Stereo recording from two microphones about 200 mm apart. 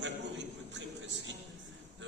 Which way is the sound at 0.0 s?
65° right (ahead or behind).